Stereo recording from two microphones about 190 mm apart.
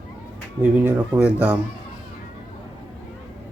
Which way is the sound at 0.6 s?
10° right (ahead or behind).